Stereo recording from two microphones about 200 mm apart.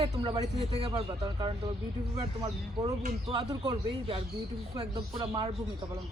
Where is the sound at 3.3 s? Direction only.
20° right (ahead or behind).